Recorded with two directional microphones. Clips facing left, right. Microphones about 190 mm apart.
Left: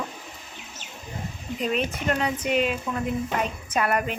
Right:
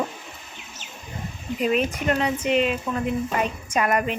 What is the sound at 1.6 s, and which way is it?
Speech, 5° right (ahead or behind).